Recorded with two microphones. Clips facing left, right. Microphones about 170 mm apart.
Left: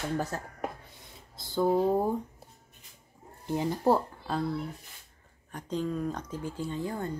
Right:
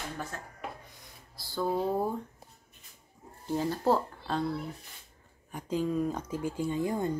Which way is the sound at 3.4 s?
15° left (ahead or behind).